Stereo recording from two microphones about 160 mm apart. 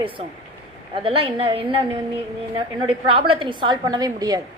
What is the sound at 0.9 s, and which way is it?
A woman's voice, 35° right (ahead or behind).